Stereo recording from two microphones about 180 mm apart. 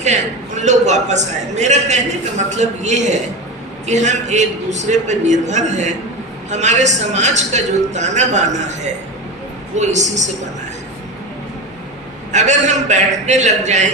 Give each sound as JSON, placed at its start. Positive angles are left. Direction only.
{"t": 0.0, "sound": "a man's voice", "side_deg": -40}
{"t": 12.3, "sound": "a man's voice", "side_deg": -40}